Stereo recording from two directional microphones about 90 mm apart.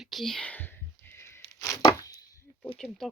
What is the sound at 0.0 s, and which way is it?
Speech, centre (ahead or behind).